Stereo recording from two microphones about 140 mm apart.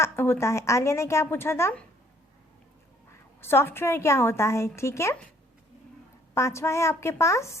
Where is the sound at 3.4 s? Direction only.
15° left (ahead or behind).